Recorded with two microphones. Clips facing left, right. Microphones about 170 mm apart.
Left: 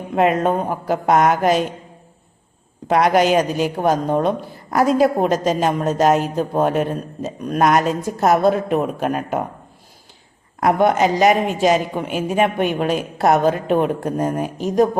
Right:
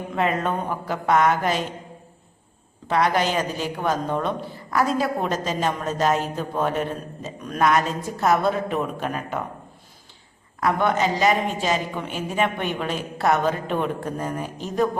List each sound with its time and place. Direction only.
0.1 s a man's voice: 45° left (ahead or behind)
2.8 s a man's voice: 45° left (ahead or behind)
10.6 s a man's voice: 45° left (ahead or behind)